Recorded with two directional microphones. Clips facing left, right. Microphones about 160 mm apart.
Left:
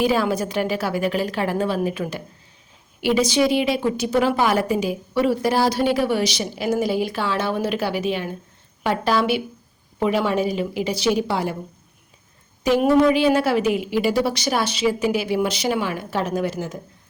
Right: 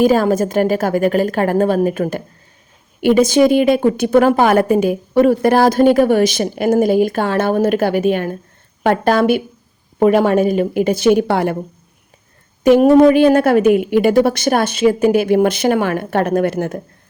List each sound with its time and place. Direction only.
0.0 s a woman's voice: 45° right (ahead or behind)
12.6 s a woman's voice: 50° right (ahead or behind)